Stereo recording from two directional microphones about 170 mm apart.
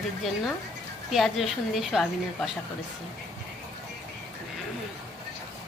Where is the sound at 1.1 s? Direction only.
Centre (ahead or behind).